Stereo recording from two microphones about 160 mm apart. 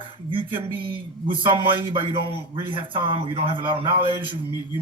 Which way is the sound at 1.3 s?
30° right (ahead or behind).